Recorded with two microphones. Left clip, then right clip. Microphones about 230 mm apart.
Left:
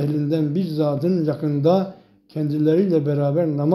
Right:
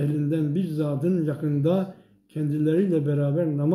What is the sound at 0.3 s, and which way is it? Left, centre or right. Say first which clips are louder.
Speech: left 4 dB; centre.